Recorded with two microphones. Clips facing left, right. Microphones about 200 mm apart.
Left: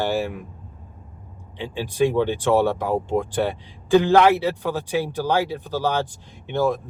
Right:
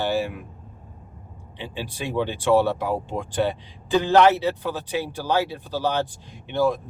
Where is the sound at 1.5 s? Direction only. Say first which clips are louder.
Left 8 dB; 15° left (ahead or behind).